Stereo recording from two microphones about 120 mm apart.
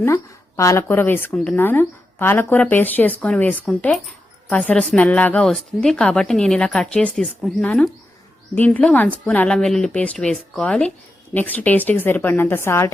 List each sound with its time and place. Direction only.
0.0 s a woman's voice: 25° left (ahead or behind)